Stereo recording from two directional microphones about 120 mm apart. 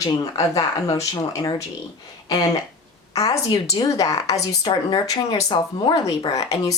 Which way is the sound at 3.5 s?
30° left (ahead or behind).